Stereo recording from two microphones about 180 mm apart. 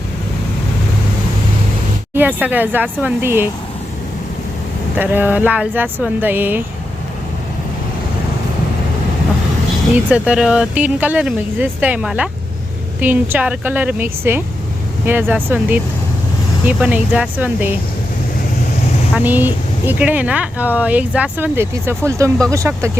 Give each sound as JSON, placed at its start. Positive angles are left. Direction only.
{"t": 2.1, "sound": "speech", "side_deg": -10}
{"t": 4.9, "sound": "speech", "side_deg": -10}
{"t": 10.1, "sound": "speech", "side_deg": -5}
{"t": 19.1, "sound": "speech", "side_deg": -10}